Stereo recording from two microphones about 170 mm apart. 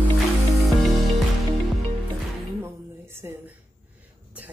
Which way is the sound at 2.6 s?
15° right (ahead or behind).